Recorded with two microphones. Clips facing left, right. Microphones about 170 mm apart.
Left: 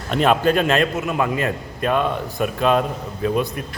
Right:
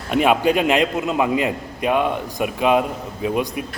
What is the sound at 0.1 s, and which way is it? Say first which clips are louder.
A man's voice: even; 10° right (ahead or behind).